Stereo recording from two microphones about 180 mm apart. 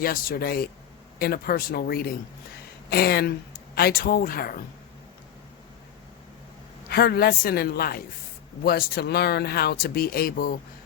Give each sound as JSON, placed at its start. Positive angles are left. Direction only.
{"t": 0.0, "sound": "speech", "side_deg": 55}
{"t": 6.9, "sound": "speech", "side_deg": 60}